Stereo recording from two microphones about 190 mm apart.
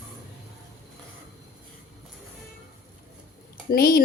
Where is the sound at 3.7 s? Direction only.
50° left (ahead or behind).